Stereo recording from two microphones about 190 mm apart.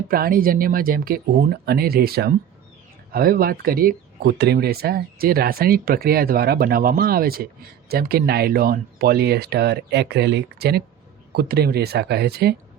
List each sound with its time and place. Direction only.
0.1 s speech: 50° right (ahead or behind)